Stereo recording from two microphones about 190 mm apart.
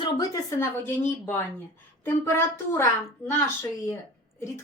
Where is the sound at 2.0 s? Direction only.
15° left (ahead or behind).